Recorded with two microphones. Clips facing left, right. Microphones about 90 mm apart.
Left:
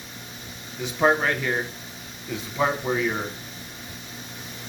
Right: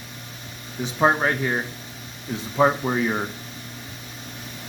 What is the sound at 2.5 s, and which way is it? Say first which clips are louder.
Speech: right 4 dB; 25° right (ahead or behind).